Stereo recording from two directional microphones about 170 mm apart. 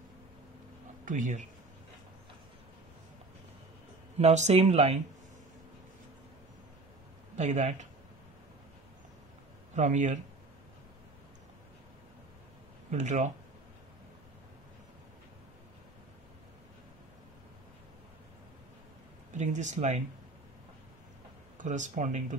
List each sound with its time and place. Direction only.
1.0 s speech: 50° right (ahead or behind)
4.2 s speech: 40° right (ahead or behind)
7.3 s speech: 45° right (ahead or behind)
9.8 s speech: 45° right (ahead or behind)
12.9 s speech: 45° right (ahead or behind)
19.3 s speech: 45° right (ahead or behind)
21.5 s speech: 45° right (ahead or behind)